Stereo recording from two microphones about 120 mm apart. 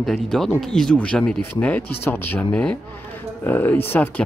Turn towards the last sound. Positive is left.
turn(degrees=15)  # may be behind; listen again after turning